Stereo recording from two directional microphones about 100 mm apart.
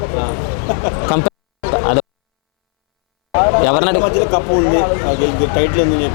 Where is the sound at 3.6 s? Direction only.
15° left (ahead or behind).